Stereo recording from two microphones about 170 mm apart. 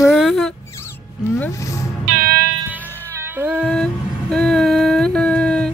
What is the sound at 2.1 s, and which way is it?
Music, 60° right (ahead or behind).